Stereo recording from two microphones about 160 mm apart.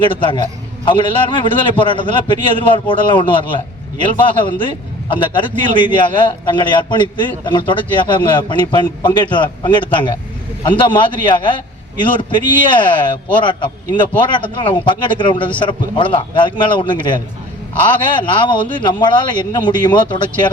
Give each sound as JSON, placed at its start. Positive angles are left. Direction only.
{"t": 0.0, "sound": "a man's voice", "side_deg": 30}